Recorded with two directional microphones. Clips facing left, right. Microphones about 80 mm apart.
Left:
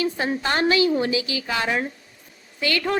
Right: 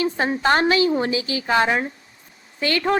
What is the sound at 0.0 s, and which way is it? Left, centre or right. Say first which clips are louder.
A woman's voice: right 3 dB; right.